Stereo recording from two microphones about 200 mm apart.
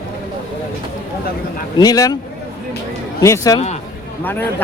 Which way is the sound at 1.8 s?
20° left (ahead or behind).